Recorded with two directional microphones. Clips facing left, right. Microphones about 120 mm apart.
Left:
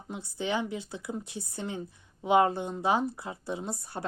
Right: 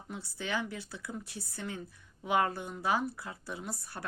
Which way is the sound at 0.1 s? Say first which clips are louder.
Left 5 dB; 20° left (ahead or behind).